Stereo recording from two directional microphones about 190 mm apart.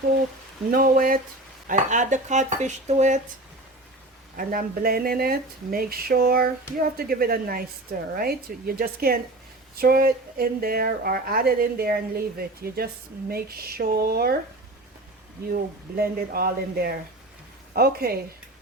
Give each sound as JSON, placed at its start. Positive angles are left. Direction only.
{"t": 0.7, "sound": "a woman's voice", "side_deg": -50}
{"t": 4.4, "sound": "a woman's voice", "side_deg": -50}
{"t": 16.0, "sound": "a woman's voice", "side_deg": -50}